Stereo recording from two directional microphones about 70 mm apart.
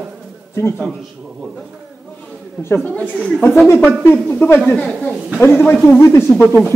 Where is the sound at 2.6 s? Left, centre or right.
Left.